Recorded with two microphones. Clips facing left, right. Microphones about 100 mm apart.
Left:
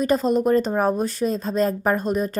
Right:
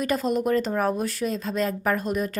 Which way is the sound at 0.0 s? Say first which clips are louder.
Left 5 dB; 30° left (ahead or behind).